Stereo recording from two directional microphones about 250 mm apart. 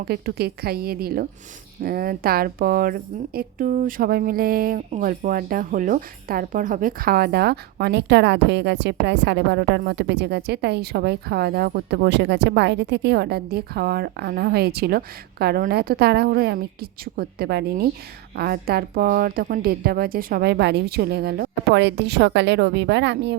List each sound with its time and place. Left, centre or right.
0.0 s speech: right